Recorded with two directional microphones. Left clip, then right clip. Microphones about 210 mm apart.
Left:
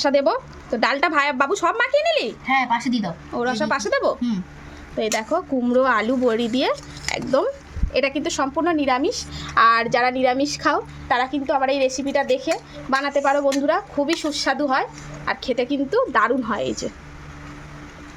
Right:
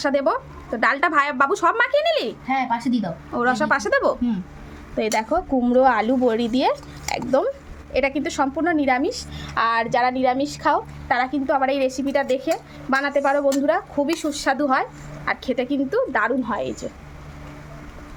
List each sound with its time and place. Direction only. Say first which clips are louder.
0.0 s a woman's voice: left 2 dB; 10° left (ahead or behind)